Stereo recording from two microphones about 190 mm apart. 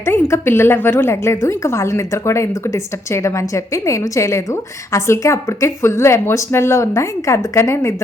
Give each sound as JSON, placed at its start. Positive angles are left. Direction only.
{"t": 0.0, "sound": "a woman's voice", "side_deg": 10}